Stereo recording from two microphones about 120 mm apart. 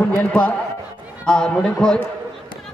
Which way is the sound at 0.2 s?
10° left (ahead or behind).